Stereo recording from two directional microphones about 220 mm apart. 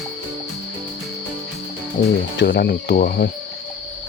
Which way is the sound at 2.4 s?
50° left (ahead or behind).